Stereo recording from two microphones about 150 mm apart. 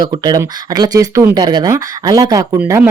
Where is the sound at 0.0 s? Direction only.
25° right (ahead or behind).